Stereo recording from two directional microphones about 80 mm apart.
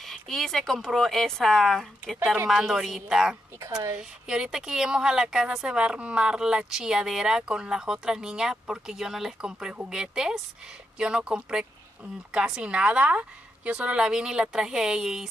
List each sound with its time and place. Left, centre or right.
0.0 s speech: centre
3.5 s speech: right
3.9 s speech: centre